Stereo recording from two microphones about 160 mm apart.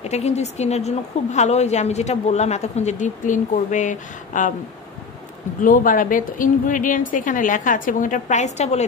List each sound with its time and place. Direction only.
0.0 s a woman's voice: 45° left (ahead or behind)
5.6 s speech: 55° left (ahead or behind)